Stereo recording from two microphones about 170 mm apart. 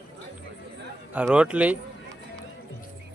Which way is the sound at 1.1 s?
5° right (ahead or behind).